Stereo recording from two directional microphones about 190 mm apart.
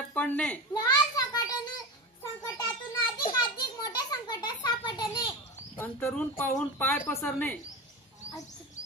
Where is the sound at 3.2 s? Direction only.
20° left (ahead or behind).